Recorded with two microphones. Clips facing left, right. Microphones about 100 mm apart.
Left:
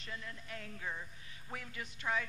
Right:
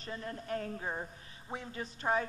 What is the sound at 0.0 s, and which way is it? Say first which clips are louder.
Speech: right 6 dB; 40° right (ahead or behind).